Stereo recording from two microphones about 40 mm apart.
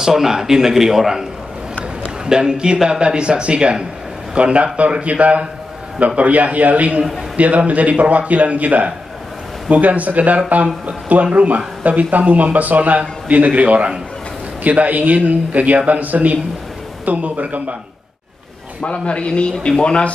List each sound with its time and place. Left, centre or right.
0.0 s a man's voice: centre; by 17.7 s right
18.8 s speech: left